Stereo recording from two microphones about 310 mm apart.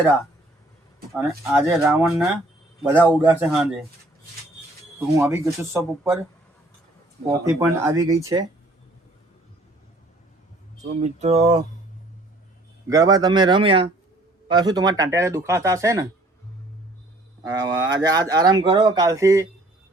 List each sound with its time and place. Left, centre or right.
1.1 s speech: centre
4.9 s speech: centre
7.3 s speech: centre
11.0 s speech: right
12.9 s speech: centre
17.4 s speech: centre